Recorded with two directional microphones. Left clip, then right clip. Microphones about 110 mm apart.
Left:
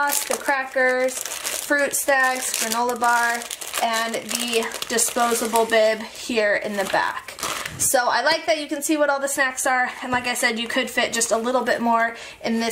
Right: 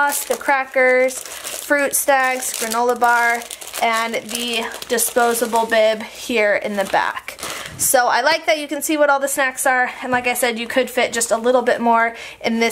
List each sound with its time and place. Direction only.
0.5 s a woman's voice: 35° right (ahead or behind)
5.2 s speech: 5° right (ahead or behind)
5.7 s a woman's voice: 30° right (ahead or behind)